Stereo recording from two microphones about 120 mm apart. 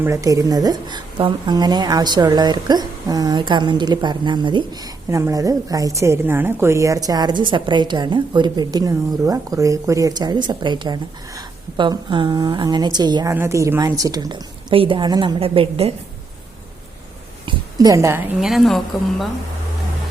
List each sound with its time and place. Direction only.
0.0 s a woman's voice: 25° right (ahead or behind)
13.3 s speech: 25° right (ahead or behind)
14.7 s a woman's voice: 45° right (ahead or behind)
15.4 s a woman's voice: 50° right (ahead or behind)
17.7 s speech: 30° right (ahead or behind)
18.3 s a woman's voice: centre (ahead or behind)